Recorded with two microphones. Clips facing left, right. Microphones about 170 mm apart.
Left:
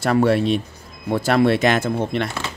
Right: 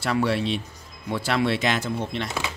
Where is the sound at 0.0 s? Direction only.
50° left (ahead or behind).